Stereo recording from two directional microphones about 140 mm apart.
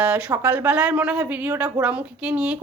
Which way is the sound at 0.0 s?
10° right (ahead or behind).